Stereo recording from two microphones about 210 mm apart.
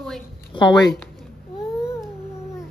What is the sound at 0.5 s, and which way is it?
Speech, 20° left (ahead or behind).